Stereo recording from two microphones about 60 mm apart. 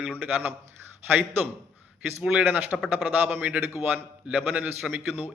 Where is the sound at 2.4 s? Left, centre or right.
Right.